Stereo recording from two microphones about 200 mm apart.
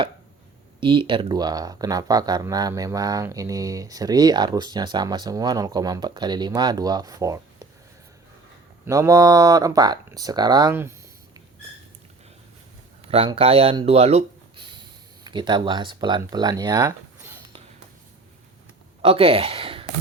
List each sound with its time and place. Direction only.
0.8 s speech: 25° right (ahead or behind)
8.8 s speech: 15° right (ahead or behind)
13.1 s speech: 30° right (ahead or behind)
19.0 s speech: 30° right (ahead or behind)